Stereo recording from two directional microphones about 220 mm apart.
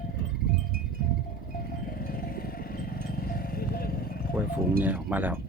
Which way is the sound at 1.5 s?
40° left (ahead or behind).